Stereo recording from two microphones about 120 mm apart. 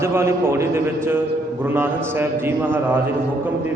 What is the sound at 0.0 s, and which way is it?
A man's voice, 20° right (ahead or behind).